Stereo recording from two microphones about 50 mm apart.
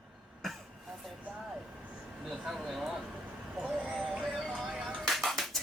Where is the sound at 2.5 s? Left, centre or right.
Centre.